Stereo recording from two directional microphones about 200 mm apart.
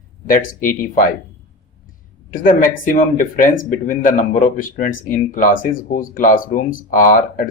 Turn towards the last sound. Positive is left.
turn(degrees=45)  # may be behind; listen again after turning